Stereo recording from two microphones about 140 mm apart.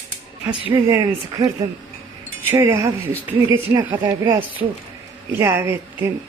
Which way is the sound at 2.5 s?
15° right (ahead or behind).